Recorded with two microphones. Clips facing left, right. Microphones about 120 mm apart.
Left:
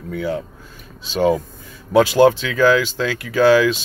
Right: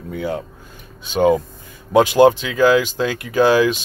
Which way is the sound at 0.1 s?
20° right (ahead or behind).